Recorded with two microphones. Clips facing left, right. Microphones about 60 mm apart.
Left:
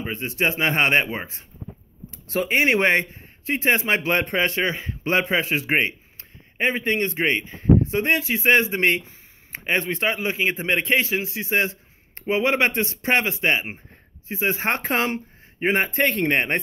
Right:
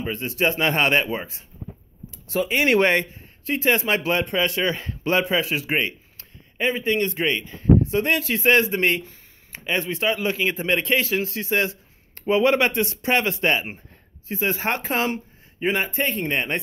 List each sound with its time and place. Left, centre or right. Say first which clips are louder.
0.0 s a man's voice: right 1 dB; left
4.1 s a man's voice: left 1 dB; left
13.2 s a man's voice: even; centre
14.7 s a man's voice: left 1 dB; left
15.9 s speech: left 4 dB; left